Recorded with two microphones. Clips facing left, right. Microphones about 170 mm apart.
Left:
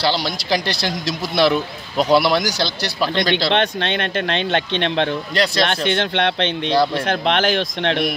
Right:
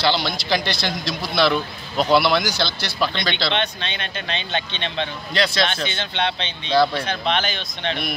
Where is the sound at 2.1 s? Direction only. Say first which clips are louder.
Left 2 dB; 40° left (ahead or behind).